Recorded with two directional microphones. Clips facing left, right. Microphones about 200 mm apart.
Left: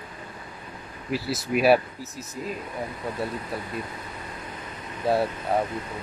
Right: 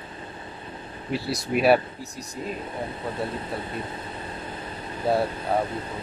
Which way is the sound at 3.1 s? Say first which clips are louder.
Right 1 dB; 25° right (ahead or behind).